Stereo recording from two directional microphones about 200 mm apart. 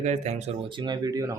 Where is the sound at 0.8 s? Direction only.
20° right (ahead or behind).